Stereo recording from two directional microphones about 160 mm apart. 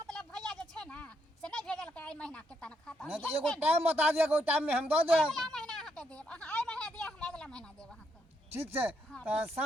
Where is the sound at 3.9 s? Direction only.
10° right (ahead or behind).